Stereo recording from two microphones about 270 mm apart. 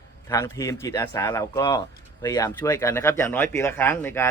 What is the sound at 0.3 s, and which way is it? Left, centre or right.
Speech, centre.